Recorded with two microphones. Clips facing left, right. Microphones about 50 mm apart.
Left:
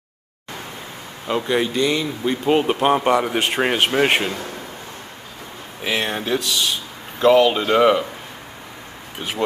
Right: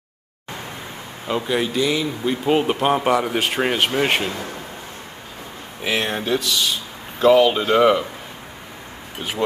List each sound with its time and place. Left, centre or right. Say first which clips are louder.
1.2 s speech: left 1 dB; centre
5.9 s speech: even; centre